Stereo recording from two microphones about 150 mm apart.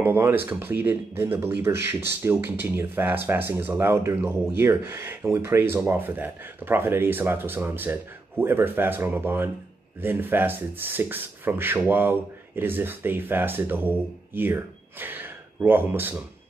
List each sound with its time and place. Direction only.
0.0 s speech: 15° right (ahead or behind)